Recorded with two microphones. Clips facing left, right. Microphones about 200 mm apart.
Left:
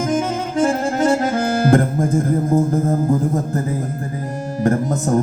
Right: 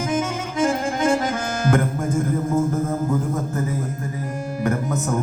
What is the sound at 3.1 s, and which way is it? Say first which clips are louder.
Speech: left 5 dB; 35° left (ahead or behind).